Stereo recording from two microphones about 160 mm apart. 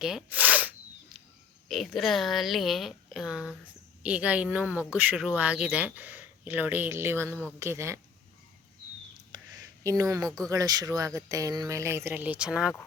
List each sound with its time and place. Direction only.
0.0 s sneeze: 5° right (ahead or behind)
1.6 s a woman's voice: centre (ahead or behind); by 7.9 s 15° right (ahead or behind)
9.3 s a sound: 20° right (ahead or behind)
10.5 s speech: 25° right (ahead or behind); by 12.7 s 5° right (ahead or behind)